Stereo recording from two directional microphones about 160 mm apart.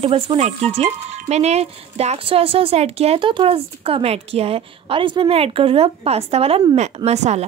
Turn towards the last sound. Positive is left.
turn(degrees=-45)  # may be behind; listen again after turning